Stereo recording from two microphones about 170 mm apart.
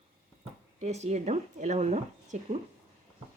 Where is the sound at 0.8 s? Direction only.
40° right (ahead or behind).